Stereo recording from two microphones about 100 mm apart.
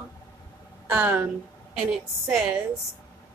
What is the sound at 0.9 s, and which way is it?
Speech, 15° right (ahead or behind).